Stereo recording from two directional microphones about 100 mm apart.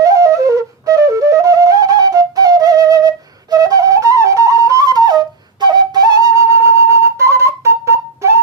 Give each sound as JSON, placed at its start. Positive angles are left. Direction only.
{"t": 0.0, "sound": "flute", "side_deg": -35}